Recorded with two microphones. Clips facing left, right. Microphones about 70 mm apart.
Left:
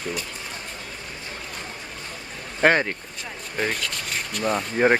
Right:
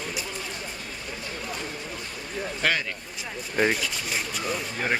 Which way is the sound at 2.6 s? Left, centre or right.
Left.